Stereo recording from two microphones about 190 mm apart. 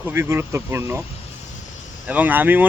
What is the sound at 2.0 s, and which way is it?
Speech, 10° right (ahead or behind).